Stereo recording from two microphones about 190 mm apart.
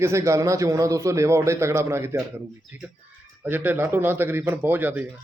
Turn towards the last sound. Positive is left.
turn(degrees=-10)  # may be behind; listen again after turning